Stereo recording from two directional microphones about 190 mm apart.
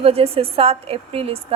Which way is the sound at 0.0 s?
30° right (ahead or behind).